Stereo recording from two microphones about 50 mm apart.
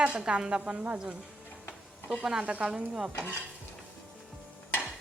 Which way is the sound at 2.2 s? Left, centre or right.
Centre.